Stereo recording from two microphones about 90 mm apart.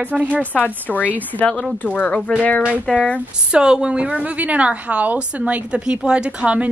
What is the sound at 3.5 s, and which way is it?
A woman's voice, 10° right (ahead or behind).